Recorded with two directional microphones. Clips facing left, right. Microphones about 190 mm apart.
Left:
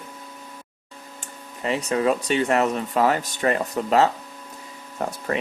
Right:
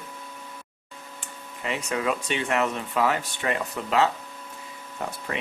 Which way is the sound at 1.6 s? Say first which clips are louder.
Left 6 dB; 35° left (ahead or behind).